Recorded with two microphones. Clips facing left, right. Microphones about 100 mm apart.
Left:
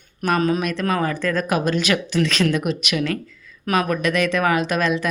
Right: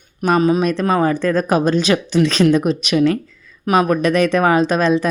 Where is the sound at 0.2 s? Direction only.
20° right (ahead or behind).